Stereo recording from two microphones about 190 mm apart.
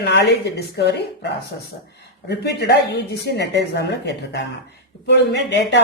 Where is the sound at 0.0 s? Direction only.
65° left (ahead or behind).